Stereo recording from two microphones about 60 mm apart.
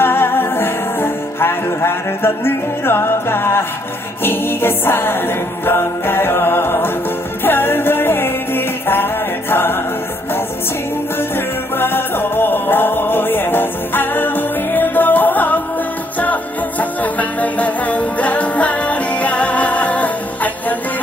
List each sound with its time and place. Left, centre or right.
0.0 s music: left
11.2 s music: left